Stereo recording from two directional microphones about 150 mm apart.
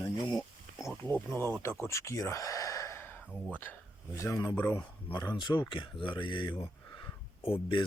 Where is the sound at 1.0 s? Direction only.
15° left (ahead or behind).